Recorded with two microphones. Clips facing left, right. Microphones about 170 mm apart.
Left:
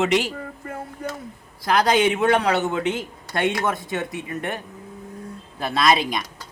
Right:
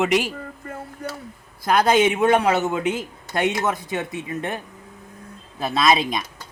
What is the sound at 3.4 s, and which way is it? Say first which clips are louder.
Speech: even; 20° right (ahead or behind).